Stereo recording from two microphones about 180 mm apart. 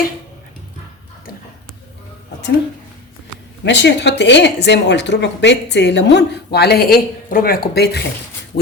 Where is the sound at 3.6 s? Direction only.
75° left (ahead or behind).